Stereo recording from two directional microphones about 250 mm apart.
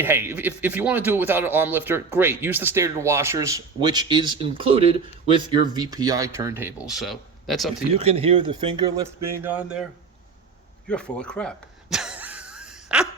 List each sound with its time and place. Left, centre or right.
0.0 s a man's voice: centre
7.9 s a man's voice: right; by 9.8 s centre
10.8 s a sound: centre